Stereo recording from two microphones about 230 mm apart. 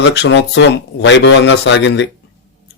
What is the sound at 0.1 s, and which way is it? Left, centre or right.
A man's voice, left.